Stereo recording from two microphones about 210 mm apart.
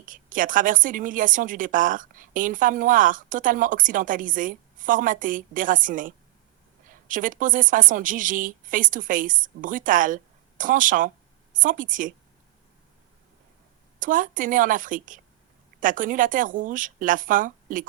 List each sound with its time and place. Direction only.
0.0 s a woman's voice: 40° right (ahead or behind)
14.0 s a woman's voice: 40° right (ahead or behind)